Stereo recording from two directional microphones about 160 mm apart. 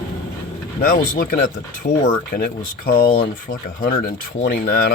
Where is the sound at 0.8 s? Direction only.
60° left (ahead or behind).